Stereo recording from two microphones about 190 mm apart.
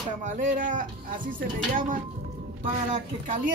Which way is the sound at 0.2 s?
40° right (ahead or behind).